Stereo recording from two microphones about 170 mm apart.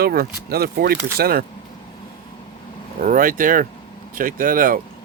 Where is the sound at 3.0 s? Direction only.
55° right (ahead or behind).